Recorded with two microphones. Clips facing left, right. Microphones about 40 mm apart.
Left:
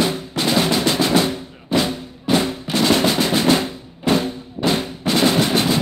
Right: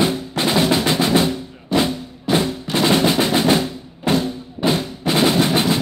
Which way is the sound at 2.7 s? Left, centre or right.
Right.